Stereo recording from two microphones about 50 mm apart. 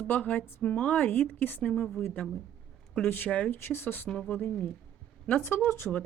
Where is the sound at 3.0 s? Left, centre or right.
Left.